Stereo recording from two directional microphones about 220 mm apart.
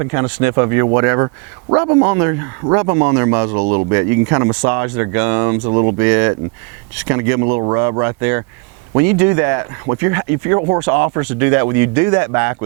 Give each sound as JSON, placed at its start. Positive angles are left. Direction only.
{"t": 0.0, "sound": "speech", "side_deg": -20}
{"t": 6.0, "sound": "speech", "side_deg": -15}